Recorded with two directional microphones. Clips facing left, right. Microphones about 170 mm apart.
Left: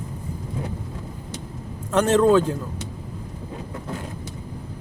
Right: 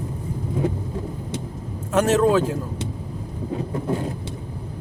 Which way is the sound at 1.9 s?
5° right (ahead or behind).